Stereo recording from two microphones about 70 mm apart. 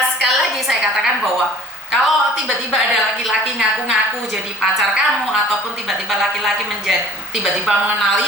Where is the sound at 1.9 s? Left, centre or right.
Centre.